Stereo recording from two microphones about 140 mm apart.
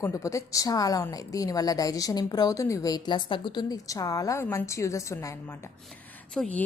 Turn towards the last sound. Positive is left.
turn(degrees=10)  # may be behind; listen again after turning